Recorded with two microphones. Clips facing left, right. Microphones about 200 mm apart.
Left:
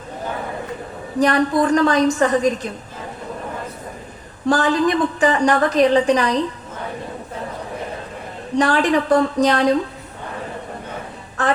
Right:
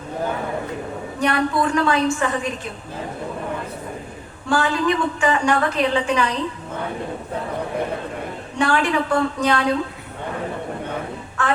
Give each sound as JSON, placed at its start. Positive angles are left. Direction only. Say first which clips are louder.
{"t": 1.2, "sound": "a woman's voice", "louder": "left 4 dB", "side_deg": 35}
{"t": 4.4, "sound": "a woman's voice", "louder": "left 3 dB", "side_deg": 40}
{"t": 8.5, "sound": "a woman's voice", "louder": "left 3 dB", "side_deg": 35}